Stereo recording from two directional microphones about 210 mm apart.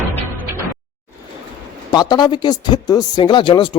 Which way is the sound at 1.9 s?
20° left (ahead or behind).